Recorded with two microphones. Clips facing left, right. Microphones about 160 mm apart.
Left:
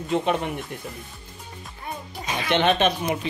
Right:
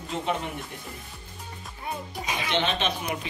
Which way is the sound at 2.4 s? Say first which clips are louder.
Left 8 dB; 55° left (ahead or behind).